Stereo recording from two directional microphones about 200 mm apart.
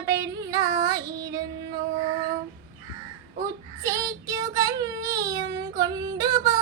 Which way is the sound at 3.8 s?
15° right (ahead or behind).